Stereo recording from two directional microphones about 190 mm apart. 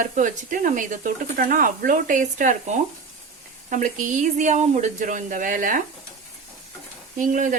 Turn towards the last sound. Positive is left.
turn(degrees=-45)  # may be behind; listen again after turning